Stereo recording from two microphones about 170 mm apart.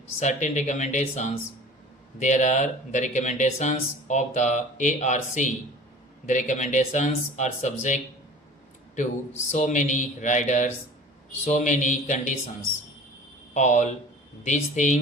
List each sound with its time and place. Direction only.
0.2 s speech: 45° left (ahead or behind)
9.5 s speech: 45° left (ahead or behind)
13.5 s speech: 45° left (ahead or behind)